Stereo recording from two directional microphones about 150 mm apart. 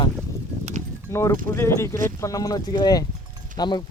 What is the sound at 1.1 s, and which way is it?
Speech, 20° left (ahead or behind).